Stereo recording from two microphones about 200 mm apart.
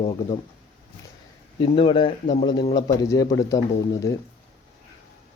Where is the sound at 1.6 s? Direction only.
25° left (ahead or behind).